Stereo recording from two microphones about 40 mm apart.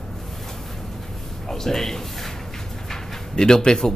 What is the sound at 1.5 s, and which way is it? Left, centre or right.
Speech, centre.